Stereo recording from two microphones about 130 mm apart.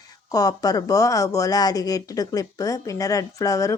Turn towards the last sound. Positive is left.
turn(degrees=25)  # may be behind; listen again after turning